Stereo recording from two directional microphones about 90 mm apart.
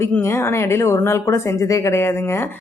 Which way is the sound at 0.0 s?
30° left (ahead or behind).